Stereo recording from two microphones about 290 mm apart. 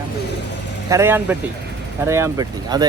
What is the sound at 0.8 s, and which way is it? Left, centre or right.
Speech, centre.